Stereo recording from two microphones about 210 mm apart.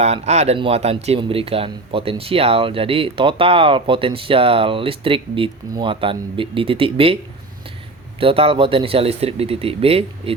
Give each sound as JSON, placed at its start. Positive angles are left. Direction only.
{"t": 0.0, "sound": "speech", "side_deg": -30}
{"t": 8.2, "sound": "speech", "side_deg": -25}